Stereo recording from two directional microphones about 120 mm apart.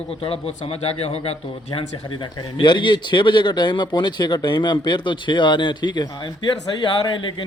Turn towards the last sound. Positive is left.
turn(degrees=40)  # may be behind; listen again after turning